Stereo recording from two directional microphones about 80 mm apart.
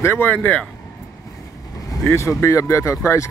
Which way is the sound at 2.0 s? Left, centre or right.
Left.